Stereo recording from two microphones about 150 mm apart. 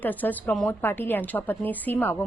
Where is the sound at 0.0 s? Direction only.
10° left (ahead or behind).